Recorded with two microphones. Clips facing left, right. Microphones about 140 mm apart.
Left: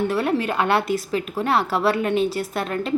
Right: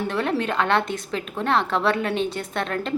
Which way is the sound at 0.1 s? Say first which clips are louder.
Left 2 dB; 5° left (ahead or behind).